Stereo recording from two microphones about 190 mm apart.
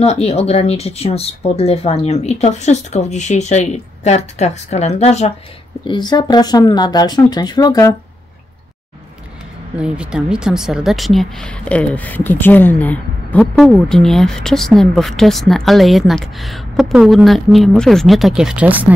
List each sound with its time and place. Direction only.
0.0 s speech: 35° left (ahead or behind)
5.9 s speech: 25° left (ahead or behind)
9.8 s speech: 5° right (ahead or behind)